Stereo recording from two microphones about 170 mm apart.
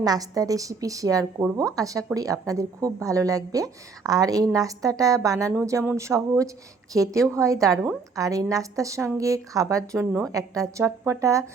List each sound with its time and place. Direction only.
0.0 s a woman's voice: 20° right (ahead or behind)